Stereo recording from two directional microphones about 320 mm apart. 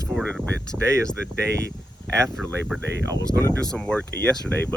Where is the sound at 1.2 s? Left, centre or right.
Right.